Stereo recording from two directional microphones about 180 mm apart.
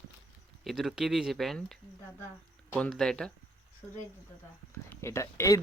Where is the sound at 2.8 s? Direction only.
5° left (ahead or behind).